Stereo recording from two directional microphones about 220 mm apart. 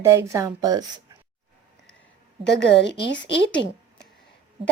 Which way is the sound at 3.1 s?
55° left (ahead or behind).